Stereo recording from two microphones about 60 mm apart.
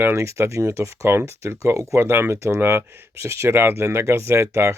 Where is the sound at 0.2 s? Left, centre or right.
Right.